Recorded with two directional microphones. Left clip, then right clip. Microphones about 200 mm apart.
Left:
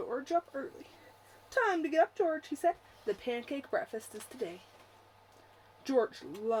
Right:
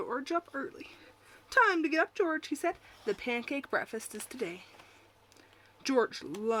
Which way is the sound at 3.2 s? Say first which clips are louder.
Right 2 dB; 60° right (ahead or behind).